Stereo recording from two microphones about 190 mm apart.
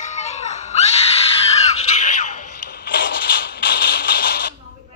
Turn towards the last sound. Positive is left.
turn(degrees=50)  # may be behind; listen again after turning